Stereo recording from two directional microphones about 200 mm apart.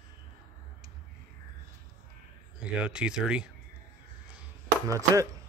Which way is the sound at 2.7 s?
5° right (ahead or behind).